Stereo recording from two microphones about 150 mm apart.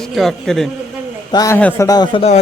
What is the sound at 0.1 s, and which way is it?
Speech, 5° left (ahead or behind).